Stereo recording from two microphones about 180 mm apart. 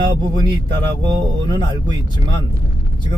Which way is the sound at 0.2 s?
25° right (ahead or behind).